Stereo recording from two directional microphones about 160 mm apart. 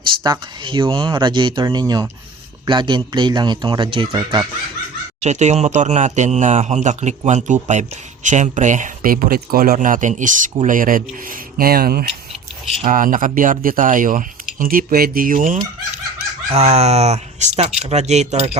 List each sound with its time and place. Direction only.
0.2 s speech: 30° right (ahead or behind)
5.2 s speech: 45° right (ahead or behind); by 12.0 s 70° right (ahead or behind)
12.8 s speech: 55° right (ahead or behind)
16.5 s speech: 40° right (ahead or behind)